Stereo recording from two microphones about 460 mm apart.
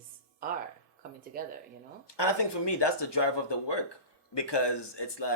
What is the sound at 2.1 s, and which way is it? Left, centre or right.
Speech, left.